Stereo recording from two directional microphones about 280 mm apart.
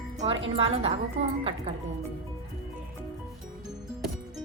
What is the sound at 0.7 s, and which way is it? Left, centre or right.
A woman's voice, right.